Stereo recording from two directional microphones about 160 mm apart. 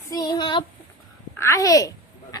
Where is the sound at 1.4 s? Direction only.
20° left (ahead or behind).